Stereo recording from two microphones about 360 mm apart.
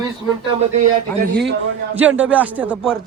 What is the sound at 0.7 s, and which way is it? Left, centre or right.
Speech, right.